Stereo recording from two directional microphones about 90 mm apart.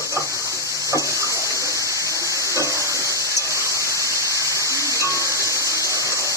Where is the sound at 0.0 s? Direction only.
35° right (ahead or behind).